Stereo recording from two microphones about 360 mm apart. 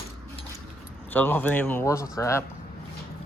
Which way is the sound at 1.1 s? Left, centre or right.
Centre.